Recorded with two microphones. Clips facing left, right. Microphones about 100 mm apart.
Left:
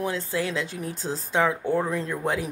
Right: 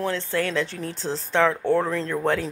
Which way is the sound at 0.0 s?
10° left (ahead or behind).